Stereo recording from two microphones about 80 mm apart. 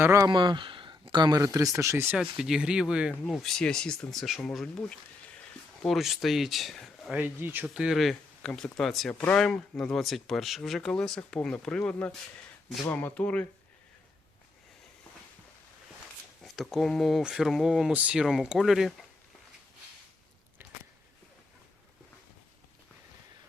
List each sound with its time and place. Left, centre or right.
0.0 s speech: right
0.3 s a sound: right
1.5 s speech: right
2.1 s speech: centre
3.2 s speech: centre
5.8 s speech: centre
7.1 s speech: right
7.7 s speech: centre
16.4 s speech: centre
17.9 s speech: centre
18.2 s speech: centre